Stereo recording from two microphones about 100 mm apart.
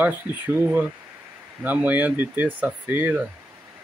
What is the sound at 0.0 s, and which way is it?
Speech, 20° right (ahead or behind).